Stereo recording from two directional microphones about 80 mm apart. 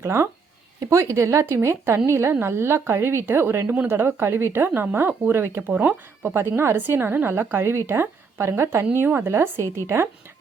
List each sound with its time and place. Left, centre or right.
0.0 s speech: right